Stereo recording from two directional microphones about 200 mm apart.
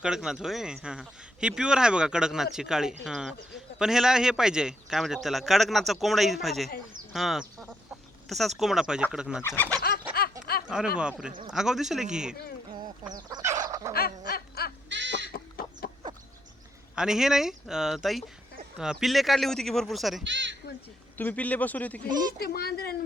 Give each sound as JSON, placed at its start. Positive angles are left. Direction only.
{"t": 0.0, "sound": "speech", "side_deg": -5}
{"t": 9.4, "sound": "speech", "side_deg": 10}
{"t": 9.8, "sound": "chicken", "side_deg": 50}
{"t": 10.9, "sound": "speech", "side_deg": -5}
{"t": 13.1, "sound": "fowl", "side_deg": -20}
{"t": 13.7, "sound": "dog", "side_deg": -15}
{"t": 13.9, "sound": "snicker", "side_deg": 50}
{"t": 14.8, "sound": "goat", "side_deg": -65}
{"t": 15.3, "sound": "chicken", "side_deg": 50}
{"t": 16.9, "sound": "speech", "side_deg": -5}
{"t": 20.2, "sound": "speech", "side_deg": -65}
{"t": 21.2, "sound": "speech", "side_deg": 10}
{"t": 22.4, "sound": "speech", "side_deg": 50}